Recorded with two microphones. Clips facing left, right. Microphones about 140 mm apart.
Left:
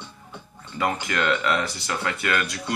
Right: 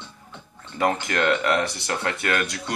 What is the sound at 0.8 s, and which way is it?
Speech, 55° right (ahead or behind).